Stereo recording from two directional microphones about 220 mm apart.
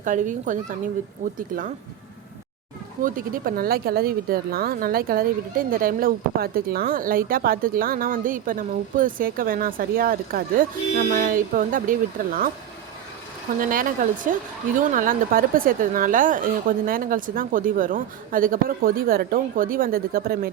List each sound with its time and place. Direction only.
0.0 s speech: 35° right (ahead or behind)
3.0 s speech: 40° right (ahead or behind)
13.6 s speech: 40° right (ahead or behind)